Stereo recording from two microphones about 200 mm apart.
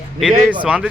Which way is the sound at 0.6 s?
5° right (ahead or behind).